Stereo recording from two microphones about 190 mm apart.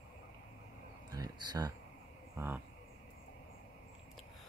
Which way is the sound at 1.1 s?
20° right (ahead or behind).